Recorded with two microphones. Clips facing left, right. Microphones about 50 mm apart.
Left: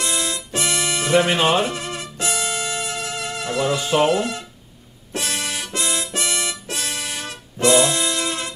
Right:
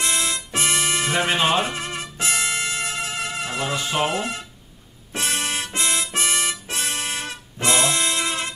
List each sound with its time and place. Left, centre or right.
0.0 s music: right
2.9 s wind instrument: right
4.1 s speech: right
5.1 s music: right